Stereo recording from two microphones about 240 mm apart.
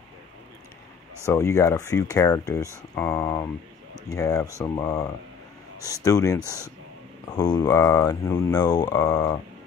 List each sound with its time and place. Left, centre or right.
1.2 s speech: centre